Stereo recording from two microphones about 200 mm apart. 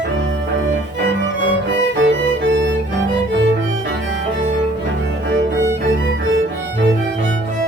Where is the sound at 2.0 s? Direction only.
65° right (ahead or behind).